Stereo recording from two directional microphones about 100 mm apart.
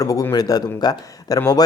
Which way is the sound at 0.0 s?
35° left (ahead or behind).